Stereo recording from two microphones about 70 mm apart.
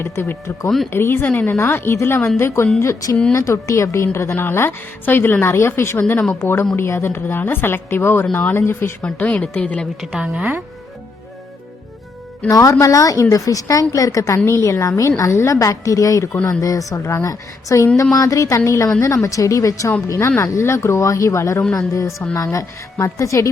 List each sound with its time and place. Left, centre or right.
0.0 s a woman's voice: left
9.1 s a woman's voice: left
12.5 s a woman's voice: left
14.3 s a woman's voice: left